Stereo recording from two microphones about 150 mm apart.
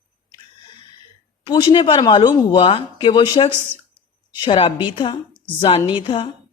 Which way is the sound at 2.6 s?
40° left (ahead or behind).